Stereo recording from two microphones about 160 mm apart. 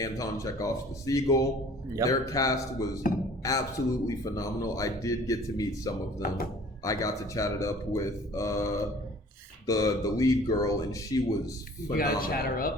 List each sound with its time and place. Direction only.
0.0 s speech: 20° left (ahead or behind)
12.2 s speech: 65° left (ahead or behind)